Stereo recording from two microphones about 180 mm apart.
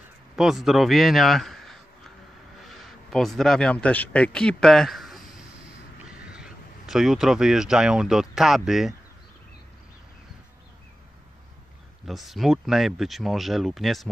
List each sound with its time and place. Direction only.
0.4 s a man's voice: centre (ahead or behind)
12.1 s speech: centre (ahead or behind)